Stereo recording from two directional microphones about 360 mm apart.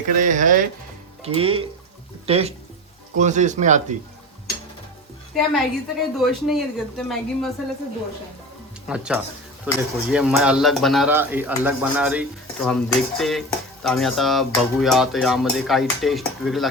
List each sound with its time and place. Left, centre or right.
0.2 s speech: right
5.3 s speech: centre
8.9 s speech: centre